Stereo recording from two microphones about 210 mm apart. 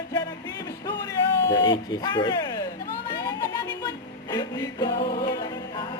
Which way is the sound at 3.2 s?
15° left (ahead or behind).